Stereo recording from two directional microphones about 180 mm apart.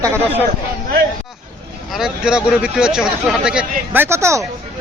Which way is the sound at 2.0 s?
5° right (ahead or behind).